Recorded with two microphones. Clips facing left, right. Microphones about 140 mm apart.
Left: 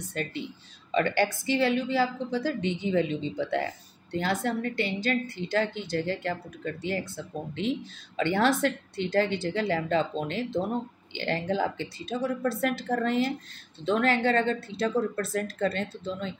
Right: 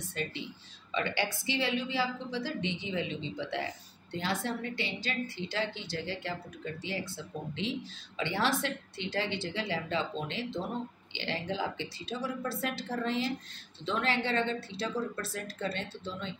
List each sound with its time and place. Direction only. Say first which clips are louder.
0.1 s a woman's voice: left 4 dB; 50° left (ahead or behind)
8.2 s a woman's voice: left 7 dB; 50° left (ahead or behind)